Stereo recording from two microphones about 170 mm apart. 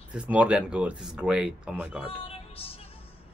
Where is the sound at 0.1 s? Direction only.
5° right (ahead or behind).